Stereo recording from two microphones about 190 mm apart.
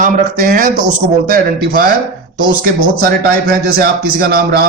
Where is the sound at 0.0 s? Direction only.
45° right (ahead or behind).